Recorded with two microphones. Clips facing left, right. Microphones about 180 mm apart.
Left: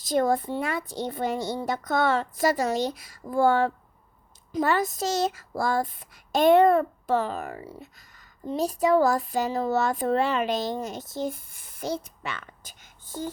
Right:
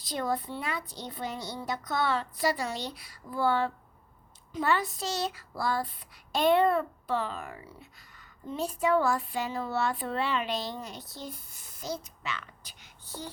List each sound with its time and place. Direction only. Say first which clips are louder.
0.0 s speech: left 8 dB; 45° left (ahead or behind)